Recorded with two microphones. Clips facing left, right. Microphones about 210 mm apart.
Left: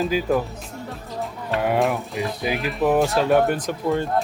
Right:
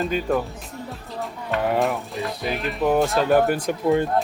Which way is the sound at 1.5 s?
Centre (ahead or behind).